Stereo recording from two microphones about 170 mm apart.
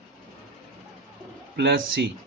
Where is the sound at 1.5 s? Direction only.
80° right.